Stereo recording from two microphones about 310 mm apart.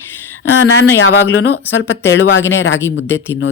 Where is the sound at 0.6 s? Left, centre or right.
Left.